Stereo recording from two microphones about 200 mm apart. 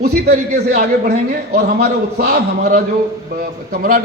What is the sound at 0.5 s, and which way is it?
A man's voice, 55° right (ahead or behind).